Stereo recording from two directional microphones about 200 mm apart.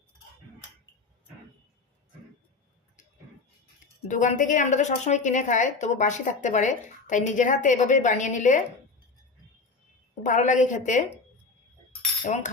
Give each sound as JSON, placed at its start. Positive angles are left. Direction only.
{"t": 4.1, "sound": "a woman's voice", "side_deg": 40}
{"t": 10.2, "sound": "a woman's voice", "side_deg": 40}
{"t": 12.2, "sound": "a sound", "side_deg": 35}